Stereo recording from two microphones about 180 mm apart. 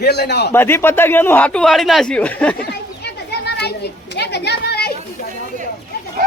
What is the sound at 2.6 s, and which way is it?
Children playing, 65° left (ahead or behind).